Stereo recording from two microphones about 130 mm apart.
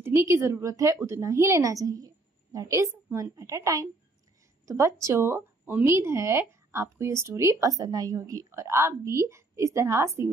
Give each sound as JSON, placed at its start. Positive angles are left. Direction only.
{"t": 0.0, "sound": "speech", "side_deg": -20}